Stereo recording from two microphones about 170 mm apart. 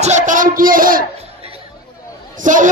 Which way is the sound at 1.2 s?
35° right (ahead or behind).